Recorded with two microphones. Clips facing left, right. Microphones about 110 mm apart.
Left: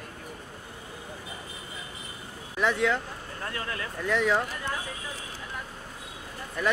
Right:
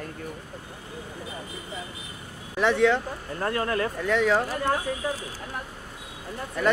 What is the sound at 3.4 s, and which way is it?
Speech, 45° right (ahead or behind).